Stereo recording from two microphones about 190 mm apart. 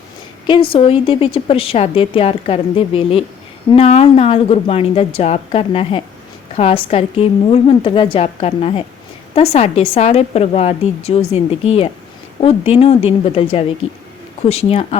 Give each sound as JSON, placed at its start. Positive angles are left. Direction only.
{"t": 0.7, "sound": "a woman's voice", "side_deg": 30}